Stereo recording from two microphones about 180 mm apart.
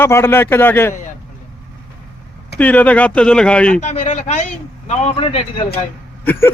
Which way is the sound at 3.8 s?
40° left (ahead or behind).